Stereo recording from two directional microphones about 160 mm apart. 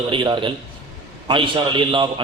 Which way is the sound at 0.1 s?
30° right (ahead or behind).